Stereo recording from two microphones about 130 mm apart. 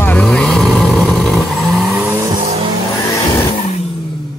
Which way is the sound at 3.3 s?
35° left (ahead or behind).